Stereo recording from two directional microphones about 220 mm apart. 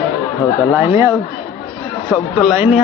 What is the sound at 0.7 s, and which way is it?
Speech, 10° right (ahead or behind).